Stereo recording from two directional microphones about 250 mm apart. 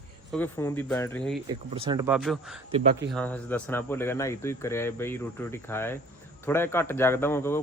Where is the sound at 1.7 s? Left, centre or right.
Centre.